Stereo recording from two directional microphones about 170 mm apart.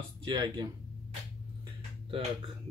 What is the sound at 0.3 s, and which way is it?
Speech, 25° right (ahead or behind).